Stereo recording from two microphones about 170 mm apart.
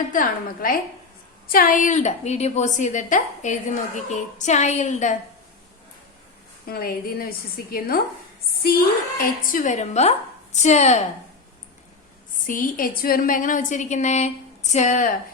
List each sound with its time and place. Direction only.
0.1 s a woman's voice: 55° left (ahead or behind)
6.7 s a woman's voice: 60° left (ahead or behind); by 11.0 s 40° left (ahead or behind)
12.5 s a woman's voice: 55° left (ahead or behind)